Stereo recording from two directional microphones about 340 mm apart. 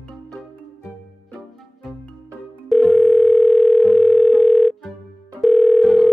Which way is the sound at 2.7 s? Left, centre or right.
Centre.